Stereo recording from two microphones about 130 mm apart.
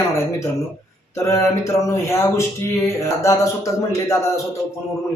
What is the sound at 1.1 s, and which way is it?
Speech, 25° left (ahead or behind).